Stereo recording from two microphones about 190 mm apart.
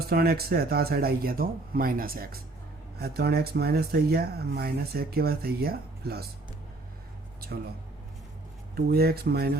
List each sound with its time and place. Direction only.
0.1 s speech: 55° right (ahead or behind)
8.7 s speech: 55° right (ahead or behind)